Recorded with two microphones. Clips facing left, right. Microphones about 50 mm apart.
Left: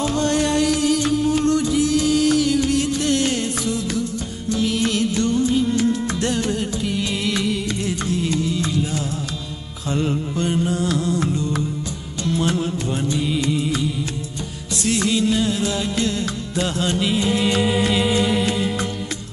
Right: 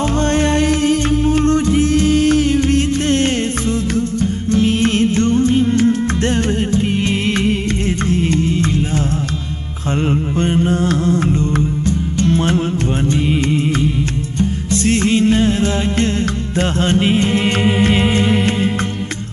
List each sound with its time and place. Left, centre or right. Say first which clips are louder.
0.0 s music: right 4 dB; right
4.5 s music: right 5 dB; right
10.0 s music: right 7 dB; right
14.4 s music: right 10 dB; right